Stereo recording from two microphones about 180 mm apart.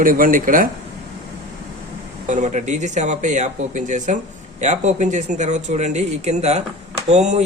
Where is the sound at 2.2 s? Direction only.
45° right (ahead or behind).